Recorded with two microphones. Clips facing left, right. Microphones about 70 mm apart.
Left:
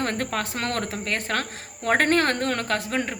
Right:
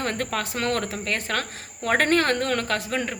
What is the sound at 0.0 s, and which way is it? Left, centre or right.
A woman's voice, left.